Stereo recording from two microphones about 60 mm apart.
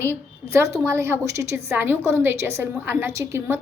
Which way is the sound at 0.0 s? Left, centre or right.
Right.